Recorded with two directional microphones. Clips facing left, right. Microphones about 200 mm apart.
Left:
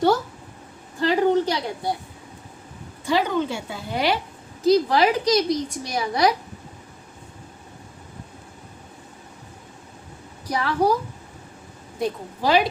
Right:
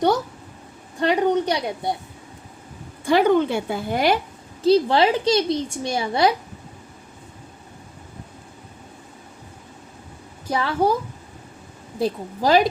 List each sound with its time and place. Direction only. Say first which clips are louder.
1.0 s a woman's voice: even; 20° right (ahead or behind)
3.0 s a woman's voice: right 5 dB; 55° right (ahead or behind)
4.6 s a woman's voice: right 1 dB; 30° right (ahead or behind)
10.4 s a woman's voice: right 1 dB; 25° right (ahead or behind)
11.9 s a woman's voice: right 3 dB; 35° right (ahead or behind)